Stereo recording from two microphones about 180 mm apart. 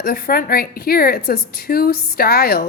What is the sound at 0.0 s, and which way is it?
A woman's voice, 55° left (ahead or behind).